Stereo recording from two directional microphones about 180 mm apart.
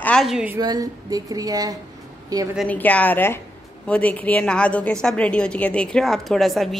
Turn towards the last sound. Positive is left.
turn(degrees=0)  # may be behind; listen again after turning